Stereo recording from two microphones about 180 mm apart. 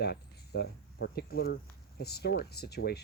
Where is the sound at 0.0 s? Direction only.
65° left (ahead or behind).